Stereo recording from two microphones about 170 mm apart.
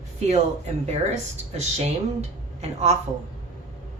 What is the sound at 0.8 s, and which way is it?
A woman's voice, 40° right (ahead or behind).